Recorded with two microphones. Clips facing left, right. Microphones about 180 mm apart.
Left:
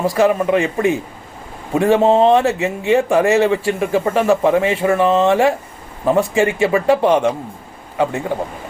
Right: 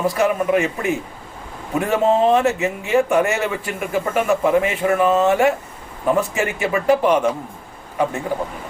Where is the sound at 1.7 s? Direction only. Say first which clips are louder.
Left 5 dB; 30° left (ahead or behind).